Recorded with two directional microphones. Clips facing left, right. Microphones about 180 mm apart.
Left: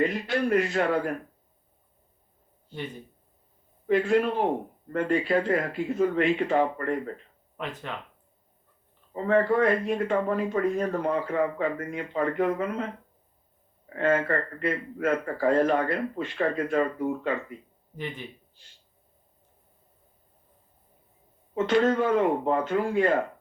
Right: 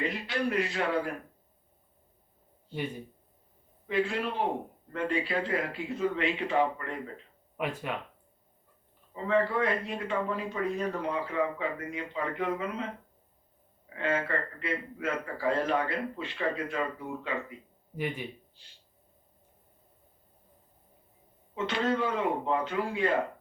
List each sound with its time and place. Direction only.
0.3 s speech: 50° left (ahead or behind)
3.8 s speech: 50° left (ahead or behind)
7.5 s speech: 10° right (ahead or behind)
9.1 s speech: 50° left (ahead or behind)
13.9 s speech: 50° left (ahead or behind)
17.9 s speech: 10° right (ahead or behind)
21.5 s speech: 50° left (ahead or behind)